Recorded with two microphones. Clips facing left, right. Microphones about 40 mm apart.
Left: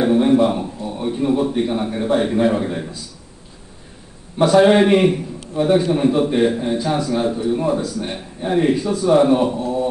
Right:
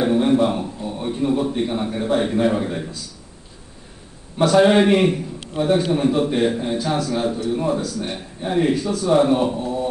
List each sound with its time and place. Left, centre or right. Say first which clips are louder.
0.0 s a man's voice: left 3 dB; centre
4.4 s a man's voice: left 2 dB; centre
5.5 s a man's voice: left 3 dB; right
5.9 s a man's voice: left 2 dB; centre
8.2 s a man's voice: left 2 dB; centre
9.1 s a man's voice: left 2 dB; centre